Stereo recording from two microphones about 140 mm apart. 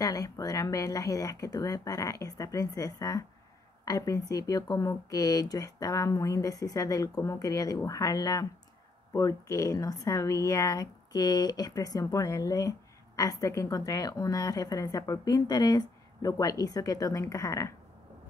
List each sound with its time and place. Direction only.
0.0 s speech: 25° left (ahead or behind)